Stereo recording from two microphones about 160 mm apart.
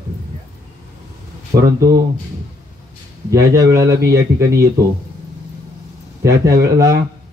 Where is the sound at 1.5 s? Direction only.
65° right (ahead or behind).